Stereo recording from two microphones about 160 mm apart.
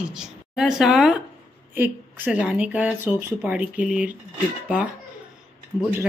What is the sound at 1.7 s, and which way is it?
A woman's voice, 10° right (ahead or behind).